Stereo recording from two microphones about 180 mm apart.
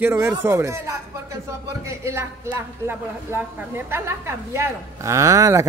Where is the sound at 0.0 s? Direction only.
15° right (ahead or behind).